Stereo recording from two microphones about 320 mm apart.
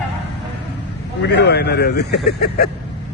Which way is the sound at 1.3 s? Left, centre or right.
Left.